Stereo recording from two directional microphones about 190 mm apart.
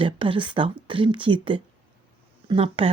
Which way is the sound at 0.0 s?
25° right (ahead or behind).